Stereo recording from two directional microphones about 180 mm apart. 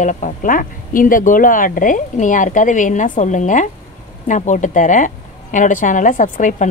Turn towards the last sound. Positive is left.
turn(degrees=45)  # may be behind; listen again after turning